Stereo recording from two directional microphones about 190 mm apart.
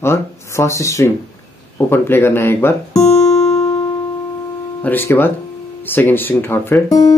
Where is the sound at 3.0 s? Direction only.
35° left (ahead or behind).